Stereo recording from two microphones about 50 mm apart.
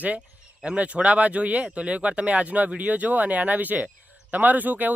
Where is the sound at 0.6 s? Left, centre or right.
Right.